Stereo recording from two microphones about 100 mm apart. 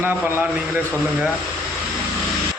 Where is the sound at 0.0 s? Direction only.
20° right (ahead or behind).